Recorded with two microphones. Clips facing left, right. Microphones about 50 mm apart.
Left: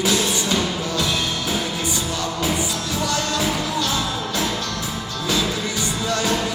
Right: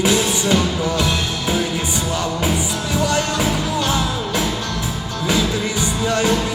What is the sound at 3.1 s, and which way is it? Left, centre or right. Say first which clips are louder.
Music: even; right.